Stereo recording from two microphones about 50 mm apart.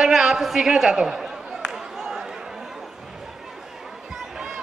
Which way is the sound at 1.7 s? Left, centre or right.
Centre.